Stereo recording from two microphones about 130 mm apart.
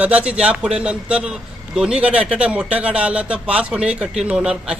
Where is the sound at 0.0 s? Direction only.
10° right (ahead or behind).